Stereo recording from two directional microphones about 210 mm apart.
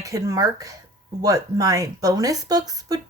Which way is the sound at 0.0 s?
15° right (ahead or behind).